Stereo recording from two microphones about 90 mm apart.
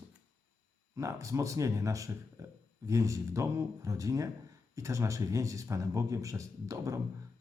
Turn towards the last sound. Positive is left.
turn(degrees=-40)  # may be behind; listen again after turning